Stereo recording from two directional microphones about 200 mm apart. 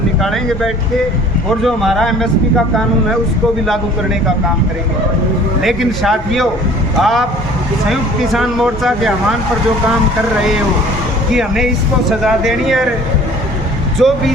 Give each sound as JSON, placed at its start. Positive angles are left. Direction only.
{"t": 0.2, "sound": "speech", "side_deg": 0}
{"t": 5.6, "sound": "speech", "side_deg": 0}
{"t": 11.3, "sound": "speech", "side_deg": 0}
{"t": 14.0, "sound": "speech", "side_deg": 0}